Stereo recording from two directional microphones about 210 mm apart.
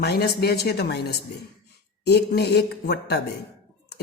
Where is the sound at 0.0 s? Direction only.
50° left (ahead or behind).